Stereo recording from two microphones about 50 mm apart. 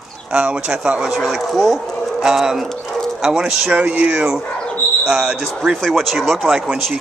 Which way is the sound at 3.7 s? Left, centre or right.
Right.